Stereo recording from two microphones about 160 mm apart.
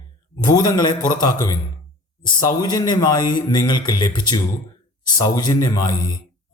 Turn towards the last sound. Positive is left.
turn(degrees=25)  # may be behind; listen again after turning